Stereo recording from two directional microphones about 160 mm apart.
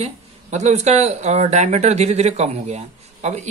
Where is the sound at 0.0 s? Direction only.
45° right (ahead or behind).